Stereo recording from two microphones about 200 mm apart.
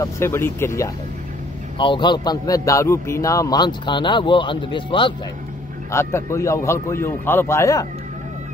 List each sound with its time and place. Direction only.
0.0 s a man's voice: 15° left (ahead or behind)
5.9 s a man's voice: 15° left (ahead or behind)